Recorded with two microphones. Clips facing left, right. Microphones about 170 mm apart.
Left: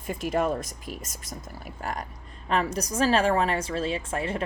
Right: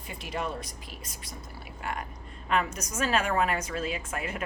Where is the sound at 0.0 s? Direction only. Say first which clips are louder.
Left 8 dB; 45° left (ahead or behind).